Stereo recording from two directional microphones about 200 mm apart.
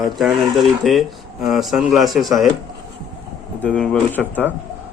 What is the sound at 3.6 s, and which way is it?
Speech, 5° left (ahead or behind).